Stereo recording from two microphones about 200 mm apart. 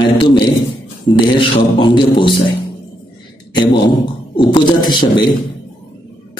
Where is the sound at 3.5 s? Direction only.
25° left (ahead or behind).